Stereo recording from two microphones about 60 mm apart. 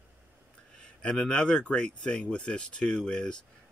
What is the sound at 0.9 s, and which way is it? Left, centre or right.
Speech, centre.